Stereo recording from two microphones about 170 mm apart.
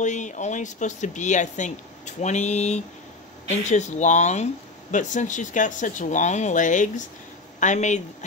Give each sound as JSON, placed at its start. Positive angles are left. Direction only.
{"t": 0.0, "sound": "speech", "side_deg": 45}